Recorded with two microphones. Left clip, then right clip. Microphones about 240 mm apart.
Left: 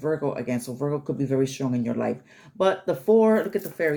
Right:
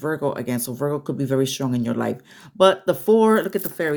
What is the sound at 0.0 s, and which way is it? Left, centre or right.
Speech, right.